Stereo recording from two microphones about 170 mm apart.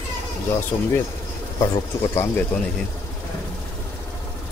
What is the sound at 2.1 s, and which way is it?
Speech, 10° left (ahead or behind).